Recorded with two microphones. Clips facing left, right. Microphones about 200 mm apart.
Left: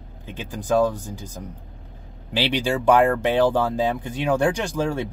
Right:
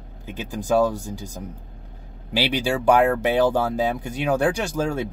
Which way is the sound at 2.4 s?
10° right (ahead or behind).